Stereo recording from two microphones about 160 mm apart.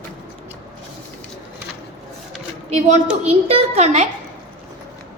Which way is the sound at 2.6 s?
45° right (ahead or behind).